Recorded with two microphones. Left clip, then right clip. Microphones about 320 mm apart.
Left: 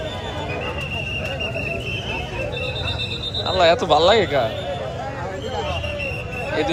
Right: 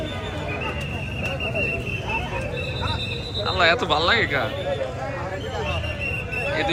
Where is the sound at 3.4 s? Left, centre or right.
Centre.